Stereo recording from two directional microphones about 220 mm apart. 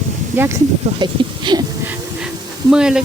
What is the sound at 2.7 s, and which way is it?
Speech, 5° right (ahead or behind).